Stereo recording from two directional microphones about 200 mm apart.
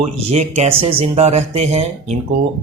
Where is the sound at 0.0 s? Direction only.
30° right (ahead or behind).